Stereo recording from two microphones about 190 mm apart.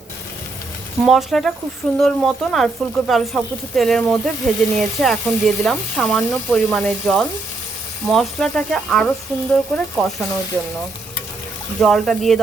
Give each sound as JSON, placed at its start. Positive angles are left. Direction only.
{"t": 1.0, "sound": "speech", "side_deg": 0}
{"t": 11.8, "sound": "speech", "side_deg": 0}